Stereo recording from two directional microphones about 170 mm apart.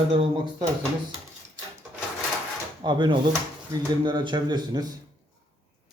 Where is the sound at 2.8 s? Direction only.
25° right (ahead or behind).